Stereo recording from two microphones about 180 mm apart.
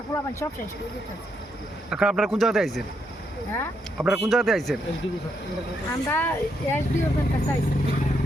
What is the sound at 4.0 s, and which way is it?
Speech, centre (ahead or behind).